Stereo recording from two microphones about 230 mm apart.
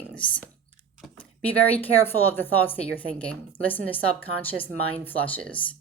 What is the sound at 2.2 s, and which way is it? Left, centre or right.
Speech, centre.